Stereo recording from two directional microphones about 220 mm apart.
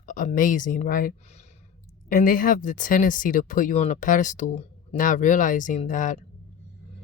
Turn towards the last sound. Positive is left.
turn(degrees=35)  # may be behind; listen again after turning